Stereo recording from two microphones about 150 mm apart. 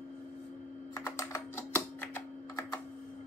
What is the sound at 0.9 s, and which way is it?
Typing, 20° left (ahead or behind).